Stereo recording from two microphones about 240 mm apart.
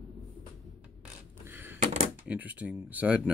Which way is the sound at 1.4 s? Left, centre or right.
Centre.